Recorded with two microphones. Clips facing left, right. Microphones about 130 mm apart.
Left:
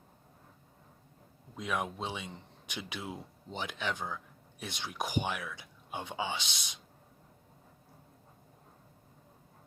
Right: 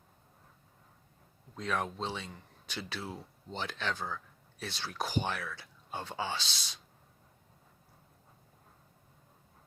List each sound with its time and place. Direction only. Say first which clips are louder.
1.5 s speech: right 1 dB; 15° left (ahead or behind)